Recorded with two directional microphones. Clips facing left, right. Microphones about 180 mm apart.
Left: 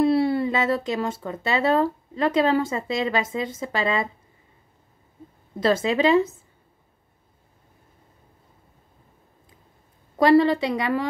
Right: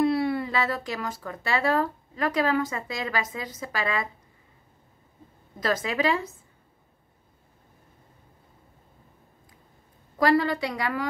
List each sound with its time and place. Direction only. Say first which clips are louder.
0.0 s speech: left 4 dB; 25° left (ahead or behind)
5.6 s speech: left 6 dB; 25° left (ahead or behind)
10.1 s speech: left 6 dB; 25° left (ahead or behind)